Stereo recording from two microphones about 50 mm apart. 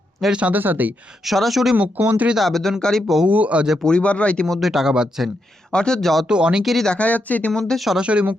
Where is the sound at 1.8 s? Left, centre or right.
Right.